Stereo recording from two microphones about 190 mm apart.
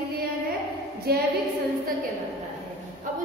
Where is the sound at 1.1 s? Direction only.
55° right (ahead or behind).